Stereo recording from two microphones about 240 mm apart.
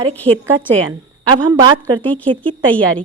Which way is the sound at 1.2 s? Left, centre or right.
Centre.